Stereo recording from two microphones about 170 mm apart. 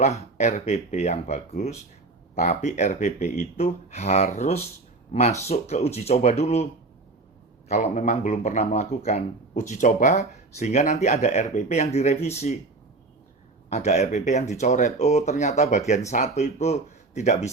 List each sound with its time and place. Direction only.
0.0 s speech: 40° left (ahead or behind)
7.7 s speech: 45° left (ahead or behind)
13.7 s speech: 40° left (ahead or behind)